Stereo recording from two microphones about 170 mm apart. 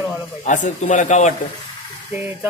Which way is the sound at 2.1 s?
15° right (ahead or behind).